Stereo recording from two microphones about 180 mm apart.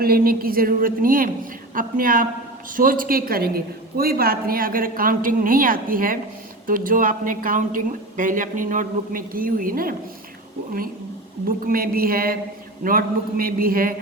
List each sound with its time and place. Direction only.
0.0 s a woman's voice: 55° right (ahead or behind)
11.4 s a woman's voice: 55° right (ahead or behind)